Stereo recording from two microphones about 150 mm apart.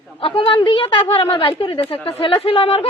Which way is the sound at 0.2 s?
35° left (ahead or behind).